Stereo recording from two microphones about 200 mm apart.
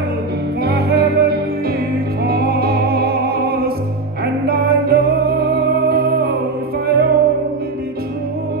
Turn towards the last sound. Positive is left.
turn(degrees=-50)  # may be behind; listen again after turning